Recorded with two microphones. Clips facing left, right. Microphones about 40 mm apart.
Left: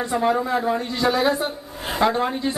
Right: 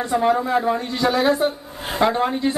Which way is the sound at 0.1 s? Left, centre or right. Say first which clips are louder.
Right 3 dB; centre.